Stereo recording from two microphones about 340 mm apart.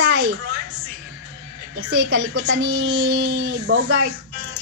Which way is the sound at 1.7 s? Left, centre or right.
Right.